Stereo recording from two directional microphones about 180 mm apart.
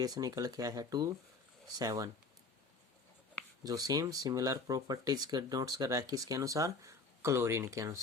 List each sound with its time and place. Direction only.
0.0 s speech: 20° right (ahead or behind)
3.6 s speech: 20° right (ahead or behind)